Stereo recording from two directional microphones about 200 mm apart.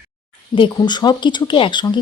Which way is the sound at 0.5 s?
25° left (ahead or behind).